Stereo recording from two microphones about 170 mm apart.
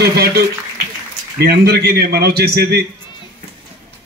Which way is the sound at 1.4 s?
65° right (ahead or behind).